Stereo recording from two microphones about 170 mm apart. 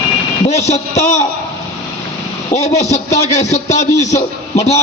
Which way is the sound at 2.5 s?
40° left (ahead or behind).